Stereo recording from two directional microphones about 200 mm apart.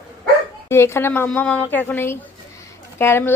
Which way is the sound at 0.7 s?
15° left (ahead or behind).